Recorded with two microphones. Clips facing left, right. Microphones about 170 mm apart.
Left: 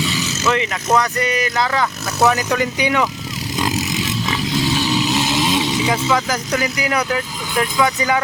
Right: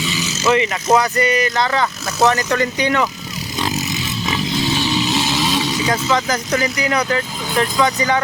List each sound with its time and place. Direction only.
0.1 s vehicle: centre (ahead or behind)
0.9 s speech: centre (ahead or behind)
3.8 s a sound: 90° left
4.8 s vehicle: 10° left (ahead or behind)
5.8 s speech: 5° left (ahead or behind)